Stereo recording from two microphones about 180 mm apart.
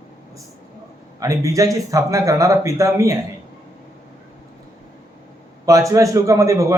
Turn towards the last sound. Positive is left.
turn(degrees=-15)  # may be behind; listen again after turning